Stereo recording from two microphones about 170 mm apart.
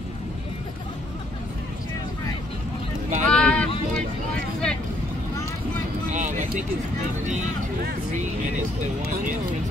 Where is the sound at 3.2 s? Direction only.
5° left (ahead or behind).